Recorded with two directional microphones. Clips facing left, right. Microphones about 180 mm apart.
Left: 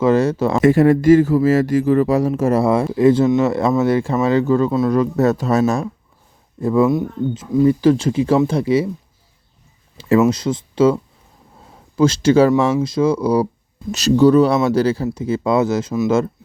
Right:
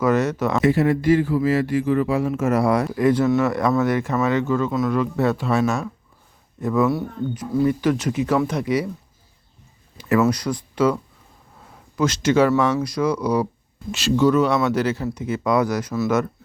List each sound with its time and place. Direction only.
0.0 s speech: 30° left (ahead or behind)
0.6 s speech: 50° left (ahead or behind); by 8.9 s 30° left (ahead or behind)
10.0 s speech: 25° left (ahead or behind)